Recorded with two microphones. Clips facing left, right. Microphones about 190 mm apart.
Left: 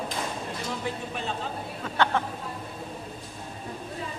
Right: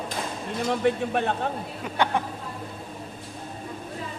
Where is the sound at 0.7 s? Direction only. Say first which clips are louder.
Right 12 dB; 60° right (ahead or behind).